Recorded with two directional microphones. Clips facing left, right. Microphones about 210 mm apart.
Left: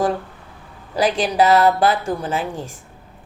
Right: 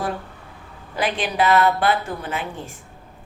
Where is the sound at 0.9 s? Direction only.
30° left (ahead or behind).